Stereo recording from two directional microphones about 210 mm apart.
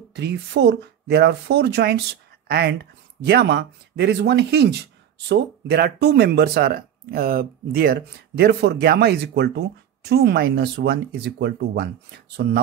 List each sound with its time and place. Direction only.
0.1 s speech: 55° right (ahead or behind)